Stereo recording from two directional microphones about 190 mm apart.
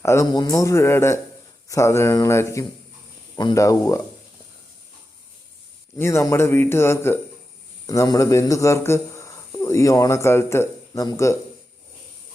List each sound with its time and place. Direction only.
0.0 s speech: 15° left (ahead or behind)
6.0 s speech: 15° left (ahead or behind)